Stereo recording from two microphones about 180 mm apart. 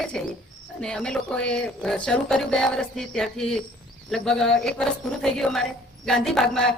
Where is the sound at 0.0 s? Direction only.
Centre (ahead or behind).